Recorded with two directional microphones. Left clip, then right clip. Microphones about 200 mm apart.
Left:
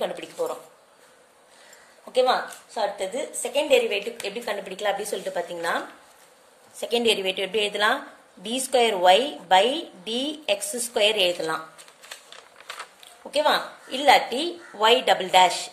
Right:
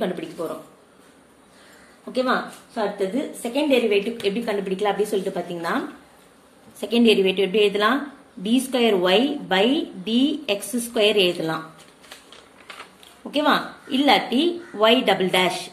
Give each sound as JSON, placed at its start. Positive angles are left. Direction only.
{"t": 0.0, "sound": "a woman's voice", "side_deg": 30}
{"t": 2.1, "sound": "a woman's voice", "side_deg": 35}
{"t": 6.8, "sound": "a woman's voice", "side_deg": 30}
{"t": 13.4, "sound": "a woman's voice", "side_deg": 30}